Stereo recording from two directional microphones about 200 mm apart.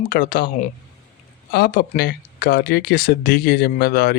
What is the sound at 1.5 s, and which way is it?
Speech, 50° left (ahead or behind).